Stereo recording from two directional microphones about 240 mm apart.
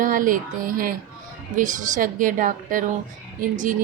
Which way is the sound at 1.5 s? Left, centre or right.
Right.